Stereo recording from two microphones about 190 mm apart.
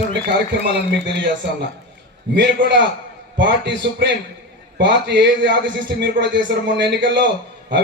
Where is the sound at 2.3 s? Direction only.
65° right (ahead or behind).